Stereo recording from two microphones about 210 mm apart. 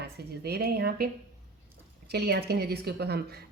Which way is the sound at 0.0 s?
50° right (ahead or behind).